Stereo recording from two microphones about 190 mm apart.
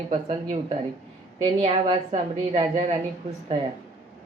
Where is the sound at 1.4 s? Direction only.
25° right (ahead or behind).